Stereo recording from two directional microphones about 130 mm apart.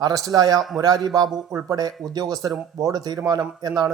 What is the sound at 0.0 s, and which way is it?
Speech, 25° right (ahead or behind).